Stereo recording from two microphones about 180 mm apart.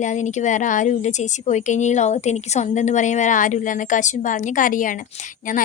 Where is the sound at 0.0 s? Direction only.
40° left (ahead or behind).